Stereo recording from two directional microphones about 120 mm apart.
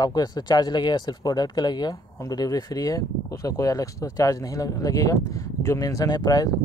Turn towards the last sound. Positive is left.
turn(degrees=35)  # may be behind; listen again after turning